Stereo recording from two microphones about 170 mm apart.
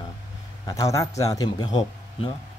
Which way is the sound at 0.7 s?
20° left (ahead or behind).